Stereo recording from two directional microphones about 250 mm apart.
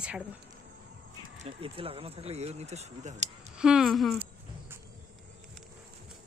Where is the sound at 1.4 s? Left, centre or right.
Right.